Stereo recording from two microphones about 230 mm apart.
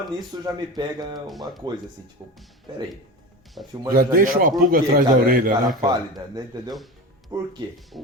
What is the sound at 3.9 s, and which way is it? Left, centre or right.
A man's voice, right.